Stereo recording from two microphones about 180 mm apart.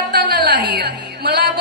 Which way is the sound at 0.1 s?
65° right (ahead or behind).